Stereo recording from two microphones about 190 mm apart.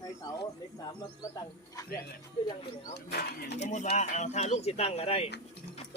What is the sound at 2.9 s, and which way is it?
Speech, 55° left (ahead or behind).